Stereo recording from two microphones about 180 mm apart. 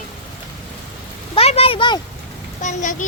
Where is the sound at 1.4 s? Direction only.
35° left (ahead or behind).